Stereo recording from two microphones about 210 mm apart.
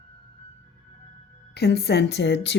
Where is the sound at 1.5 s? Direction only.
50° left (ahead or behind).